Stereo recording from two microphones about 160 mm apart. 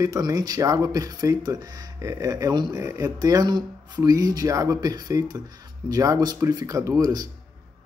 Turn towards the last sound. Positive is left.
turn(degrees=-20)  # may be behind; listen again after turning